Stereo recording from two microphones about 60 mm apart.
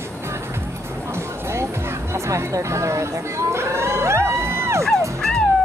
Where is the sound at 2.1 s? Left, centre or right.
Right.